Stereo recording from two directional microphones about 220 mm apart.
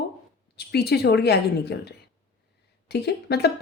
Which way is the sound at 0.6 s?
45° left (ahead or behind).